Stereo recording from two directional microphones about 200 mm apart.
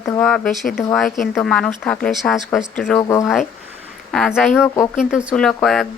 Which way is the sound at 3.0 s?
15° left (ahead or behind).